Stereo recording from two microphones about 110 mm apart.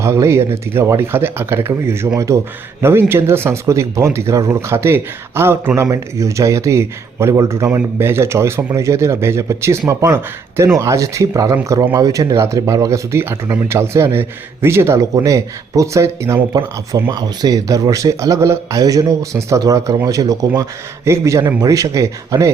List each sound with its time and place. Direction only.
0.0 s speech: 25° right (ahead or behind)